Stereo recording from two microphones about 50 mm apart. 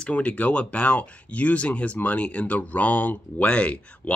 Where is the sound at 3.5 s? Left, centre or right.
Left.